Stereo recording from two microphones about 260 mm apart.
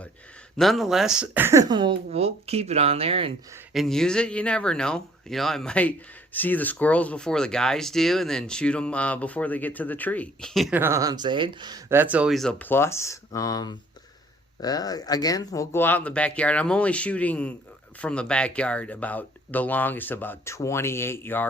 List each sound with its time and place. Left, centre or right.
0.5 s speech: centre; by 3.3 s right
3.7 s speech: centre